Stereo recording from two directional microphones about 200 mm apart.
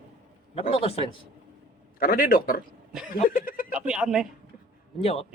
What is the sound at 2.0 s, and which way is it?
Speech, 45° left (ahead or behind).